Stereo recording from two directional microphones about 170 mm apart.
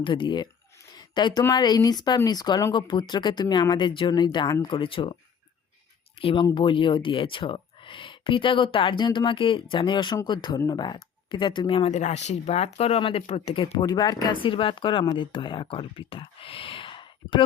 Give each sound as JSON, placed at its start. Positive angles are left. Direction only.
{"t": 0.0, "sound": "speech", "side_deg": 30}
{"t": 6.1, "sound": "speech", "side_deg": 30}